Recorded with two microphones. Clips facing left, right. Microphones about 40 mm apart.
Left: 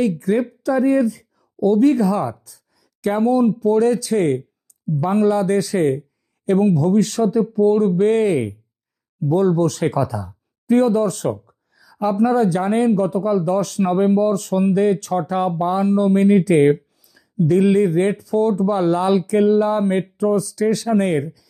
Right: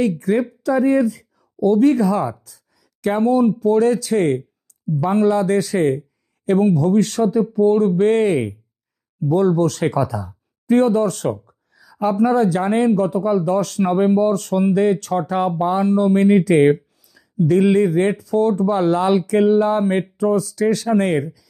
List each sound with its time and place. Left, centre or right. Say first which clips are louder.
0.2 s speech: even; right
2.4 s a sound: even; right
3.2 s speech: even; right
20.1 s speech: even; right